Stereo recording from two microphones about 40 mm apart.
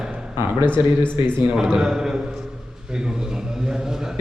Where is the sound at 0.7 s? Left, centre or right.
Left.